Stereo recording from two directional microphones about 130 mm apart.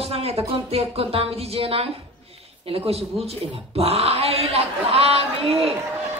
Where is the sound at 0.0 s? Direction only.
50° right (ahead or behind).